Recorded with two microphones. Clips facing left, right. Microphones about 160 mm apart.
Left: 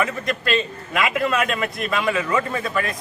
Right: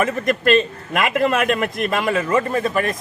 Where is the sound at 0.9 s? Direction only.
50° right (ahead or behind).